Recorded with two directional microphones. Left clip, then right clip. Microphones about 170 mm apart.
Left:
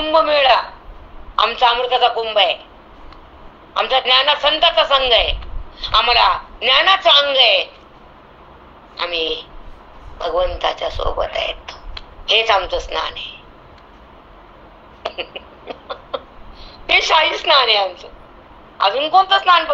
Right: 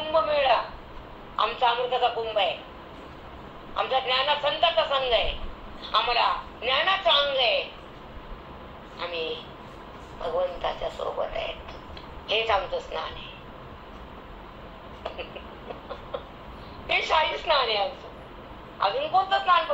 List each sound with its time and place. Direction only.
0.0 s a man's voice: 60° left (ahead or behind)
3.7 s a man's voice: 60° left (ahead or behind)
8.9 s a woman's voice: 60° left (ahead or behind)
15.0 s a sound: 55° left (ahead or behind)
16.8 s a man's voice: 55° left (ahead or behind)